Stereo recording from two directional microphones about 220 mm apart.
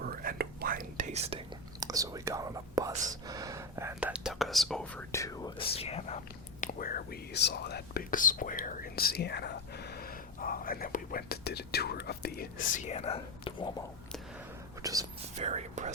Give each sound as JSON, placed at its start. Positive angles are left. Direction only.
{"t": 0.0, "sound": "whispering", "side_deg": -40}
{"t": 1.8, "sound": "speech", "side_deg": -15}
{"t": 6.6, "sound": "speech", "side_deg": 40}
{"t": 12.7, "sound": "speech", "side_deg": 30}
{"t": 14.8, "sound": "speech", "side_deg": -15}
{"t": 15.4, "sound": "speech", "side_deg": -30}